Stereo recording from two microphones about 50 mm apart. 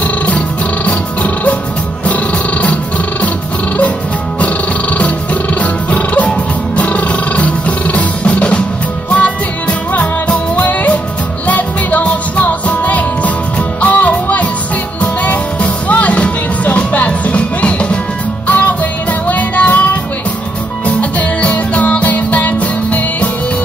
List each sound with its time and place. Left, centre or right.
0.8 s music: left
4.4 s music: left